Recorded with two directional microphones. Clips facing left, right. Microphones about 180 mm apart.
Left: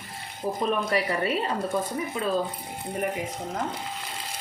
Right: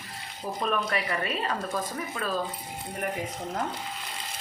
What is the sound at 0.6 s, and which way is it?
Speech, 30° left (ahead or behind).